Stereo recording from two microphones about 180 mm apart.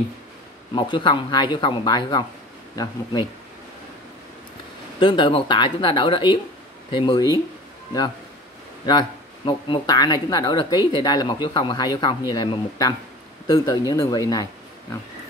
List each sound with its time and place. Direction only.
0.7 s speech: 25° left (ahead or behind)
5.0 s speech: 25° left (ahead or behind)
8.8 s speech: 25° left (ahead or behind)